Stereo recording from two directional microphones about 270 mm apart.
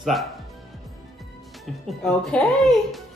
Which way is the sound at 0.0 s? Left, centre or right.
Centre.